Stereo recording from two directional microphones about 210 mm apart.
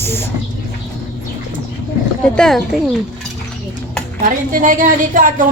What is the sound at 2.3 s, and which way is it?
Speech, 5° left (ahead or behind).